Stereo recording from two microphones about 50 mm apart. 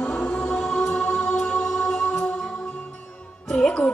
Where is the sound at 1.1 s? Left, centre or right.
Centre.